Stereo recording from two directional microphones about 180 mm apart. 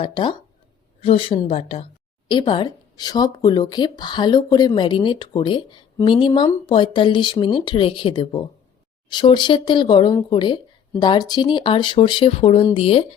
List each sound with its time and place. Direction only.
0.0 s a woman's voice: 25° left (ahead or behind)